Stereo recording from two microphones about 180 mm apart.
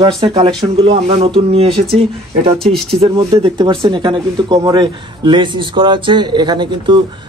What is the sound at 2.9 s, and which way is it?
Speech, 30° right (ahead or behind).